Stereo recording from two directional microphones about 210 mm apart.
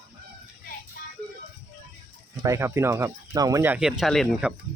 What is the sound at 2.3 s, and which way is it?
Speech, 15° right (ahead or behind).